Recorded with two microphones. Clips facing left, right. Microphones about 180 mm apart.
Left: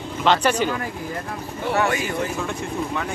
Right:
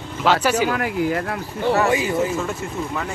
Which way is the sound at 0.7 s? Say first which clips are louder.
Right 7 dB; 75° right (ahead or behind).